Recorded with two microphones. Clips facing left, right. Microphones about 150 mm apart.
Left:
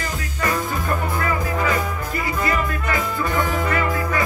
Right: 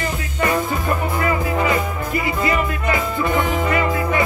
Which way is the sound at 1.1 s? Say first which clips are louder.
Right 3 dB; 15° right (ahead or behind).